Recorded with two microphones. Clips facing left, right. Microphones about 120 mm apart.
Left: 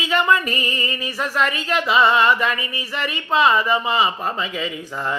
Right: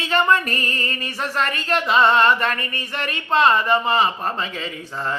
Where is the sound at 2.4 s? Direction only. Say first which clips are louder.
Left 1 dB; 40° right (ahead or behind).